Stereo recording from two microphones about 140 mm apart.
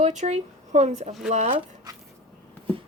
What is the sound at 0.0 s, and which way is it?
Speech, 60° right (ahead or behind).